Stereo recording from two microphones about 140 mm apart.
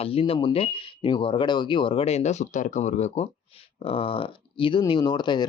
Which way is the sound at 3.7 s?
40° left (ahead or behind).